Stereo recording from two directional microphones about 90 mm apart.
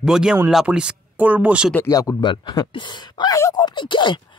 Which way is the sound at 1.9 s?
40° left (ahead or behind).